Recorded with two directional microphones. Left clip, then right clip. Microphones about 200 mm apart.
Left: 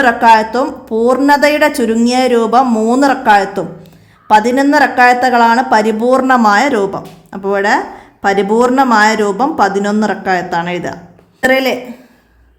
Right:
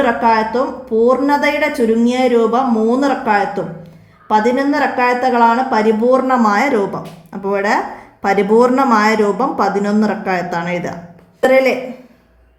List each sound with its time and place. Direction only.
0.0 s speech: 35° left (ahead or behind)